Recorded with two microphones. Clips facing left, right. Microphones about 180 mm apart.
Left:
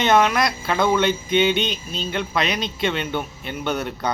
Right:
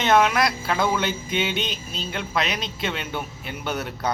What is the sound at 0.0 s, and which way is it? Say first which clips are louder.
A man's voice: left 1 dB; 5° right (ahead or behind).